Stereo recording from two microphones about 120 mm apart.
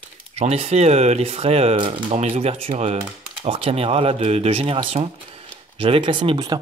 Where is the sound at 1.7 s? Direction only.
45° right (ahead or behind).